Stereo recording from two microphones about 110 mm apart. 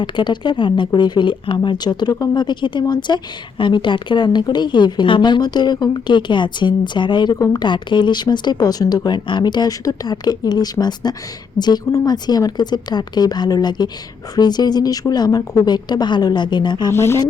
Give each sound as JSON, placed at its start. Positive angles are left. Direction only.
{"t": 0.0, "sound": "a woman's voice", "side_deg": 45}
{"t": 7.3, "sound": "speech", "side_deg": 30}
{"t": 7.6, "sound": "speech", "side_deg": 45}
{"t": 16.9, "sound": "speech", "side_deg": 25}